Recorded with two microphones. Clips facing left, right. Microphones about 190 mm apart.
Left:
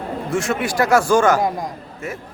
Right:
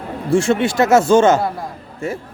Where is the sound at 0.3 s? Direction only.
30° right (ahead or behind).